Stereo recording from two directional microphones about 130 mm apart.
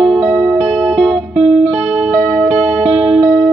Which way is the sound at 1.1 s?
40° right (ahead or behind).